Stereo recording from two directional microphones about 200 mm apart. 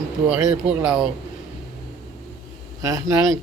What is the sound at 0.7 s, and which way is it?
Speech, 5° right (ahead or behind).